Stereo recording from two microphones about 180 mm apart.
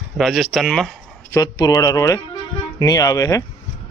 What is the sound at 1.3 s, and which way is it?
Speech, 20° left (ahead or behind).